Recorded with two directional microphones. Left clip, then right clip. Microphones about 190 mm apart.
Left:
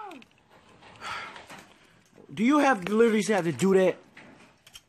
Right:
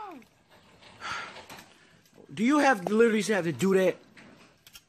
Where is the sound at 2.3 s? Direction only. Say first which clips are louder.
Left 1 dB; 5° left (ahead or behind).